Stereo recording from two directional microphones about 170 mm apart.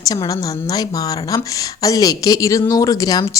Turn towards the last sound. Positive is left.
turn(degrees=20)  # may be behind; listen again after turning